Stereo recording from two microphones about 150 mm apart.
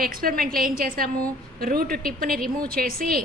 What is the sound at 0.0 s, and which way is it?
A woman's voice, 75° right (ahead or behind).